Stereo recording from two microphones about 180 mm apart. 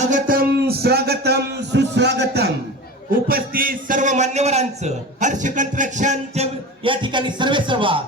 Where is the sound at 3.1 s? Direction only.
55° right (ahead or behind).